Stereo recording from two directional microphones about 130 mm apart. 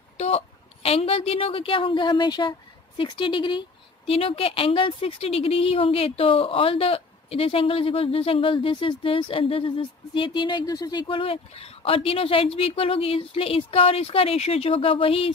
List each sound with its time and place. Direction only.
0.8 s speech: 50° left (ahead or behind)
10.6 s speech: 30° left (ahead or behind); by 15.3 s 45° left (ahead or behind)